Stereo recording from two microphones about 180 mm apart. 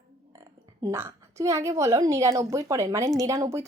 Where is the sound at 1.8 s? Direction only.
15° right (ahead or behind).